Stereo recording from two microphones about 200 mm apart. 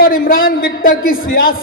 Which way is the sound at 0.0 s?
45° left (ahead or behind).